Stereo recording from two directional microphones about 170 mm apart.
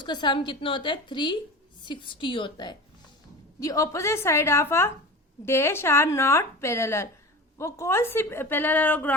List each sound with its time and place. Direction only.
0.0 s a woman's voice: 25° left (ahead or behind); by 9.1 s 10° left (ahead or behind)